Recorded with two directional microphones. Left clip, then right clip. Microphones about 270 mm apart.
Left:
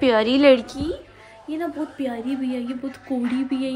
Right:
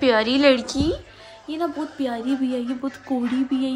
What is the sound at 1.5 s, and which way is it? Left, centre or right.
A woman's voice, centre.